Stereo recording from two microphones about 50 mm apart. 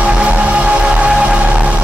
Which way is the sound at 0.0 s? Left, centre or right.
Right.